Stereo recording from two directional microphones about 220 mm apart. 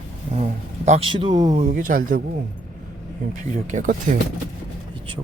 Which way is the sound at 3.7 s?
35° right (ahead or behind).